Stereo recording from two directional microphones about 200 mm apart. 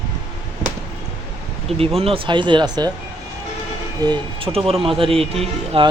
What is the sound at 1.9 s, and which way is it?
Speech, 30° right (ahead or behind).